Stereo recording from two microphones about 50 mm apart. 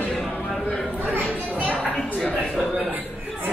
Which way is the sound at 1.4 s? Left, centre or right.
Right.